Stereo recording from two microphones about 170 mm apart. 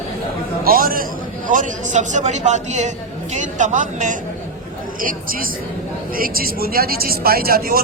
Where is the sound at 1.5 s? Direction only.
45° right (ahead or behind).